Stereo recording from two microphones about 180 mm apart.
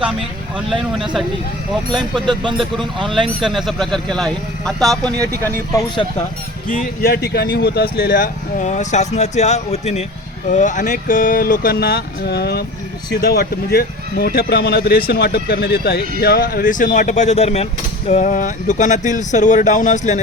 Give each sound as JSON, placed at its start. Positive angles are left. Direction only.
{"t": 1.9, "sound": "speech", "side_deg": 0}
{"t": 2.2, "sound": "speech", "side_deg": -25}
{"t": 3.4, "sound": "speech", "side_deg": 0}
{"t": 6.7, "sound": "speech", "side_deg": 55}